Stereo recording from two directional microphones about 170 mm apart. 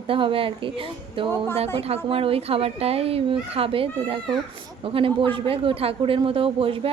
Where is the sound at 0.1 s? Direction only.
30° right (ahead or behind).